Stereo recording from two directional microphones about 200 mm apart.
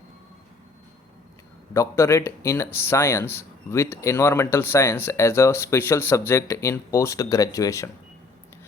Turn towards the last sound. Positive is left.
turn(degrees=15)  # may be behind; listen again after turning